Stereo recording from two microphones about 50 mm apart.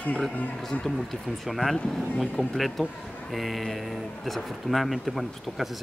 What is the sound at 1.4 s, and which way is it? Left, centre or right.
Speech, centre.